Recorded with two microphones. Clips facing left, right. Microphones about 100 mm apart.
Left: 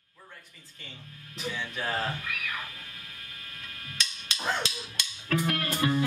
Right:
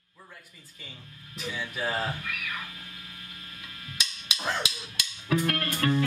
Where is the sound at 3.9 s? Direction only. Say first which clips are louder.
Even; 10° right (ahead or behind).